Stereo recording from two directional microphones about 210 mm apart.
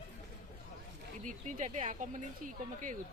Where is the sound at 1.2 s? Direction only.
35° right (ahead or behind).